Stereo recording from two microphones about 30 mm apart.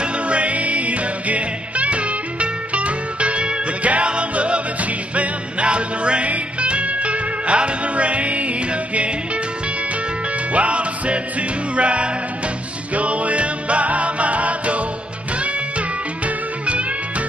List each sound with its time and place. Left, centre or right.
0.0 s music: right
10.5 s music: right